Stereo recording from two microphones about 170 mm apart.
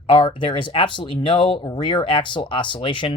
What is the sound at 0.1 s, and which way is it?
Speech, 30° left (ahead or behind).